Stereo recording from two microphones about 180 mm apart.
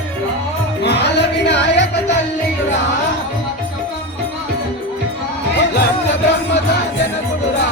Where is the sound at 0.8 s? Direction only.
70° left (ahead or behind).